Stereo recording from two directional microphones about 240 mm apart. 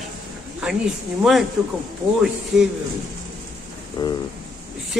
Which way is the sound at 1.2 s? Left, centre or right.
Centre.